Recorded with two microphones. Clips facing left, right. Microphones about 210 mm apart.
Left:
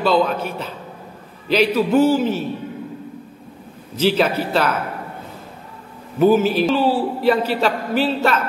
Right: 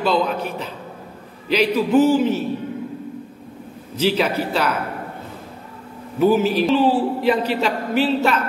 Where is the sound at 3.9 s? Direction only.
10° right (ahead or behind).